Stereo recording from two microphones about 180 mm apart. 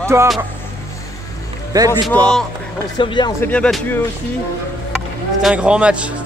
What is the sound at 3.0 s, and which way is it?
Speech, 25° left (ahead or behind).